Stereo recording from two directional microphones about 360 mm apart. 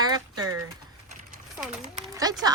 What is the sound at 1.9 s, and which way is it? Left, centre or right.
Speech, centre.